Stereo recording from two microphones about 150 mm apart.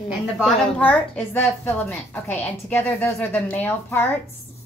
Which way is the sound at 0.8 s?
10° left (ahead or behind).